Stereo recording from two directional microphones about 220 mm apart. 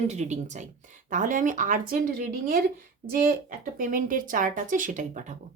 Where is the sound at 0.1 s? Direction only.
30° right (ahead or behind).